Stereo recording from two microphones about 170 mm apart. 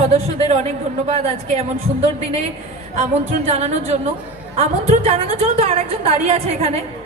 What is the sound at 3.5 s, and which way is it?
A woman's voice, 40° right (ahead or behind).